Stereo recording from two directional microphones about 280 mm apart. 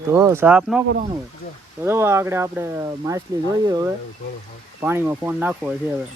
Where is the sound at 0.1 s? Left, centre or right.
Centre.